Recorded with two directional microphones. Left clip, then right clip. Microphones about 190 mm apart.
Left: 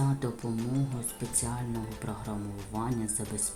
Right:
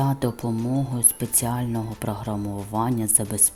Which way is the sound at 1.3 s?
45° right (ahead or behind).